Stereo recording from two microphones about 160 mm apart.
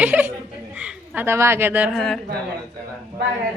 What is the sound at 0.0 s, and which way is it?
Chuckle, 10° right (ahead or behind).